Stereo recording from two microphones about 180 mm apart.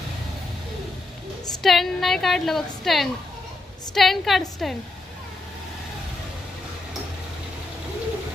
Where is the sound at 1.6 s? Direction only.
Centre (ahead or behind).